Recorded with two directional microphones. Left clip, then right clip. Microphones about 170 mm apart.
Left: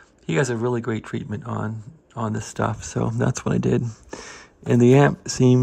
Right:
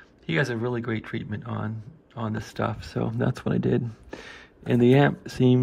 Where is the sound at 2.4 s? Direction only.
25° left (ahead or behind).